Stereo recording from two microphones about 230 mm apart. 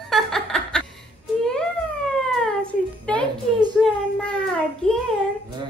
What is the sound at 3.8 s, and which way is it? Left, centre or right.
Speech, centre.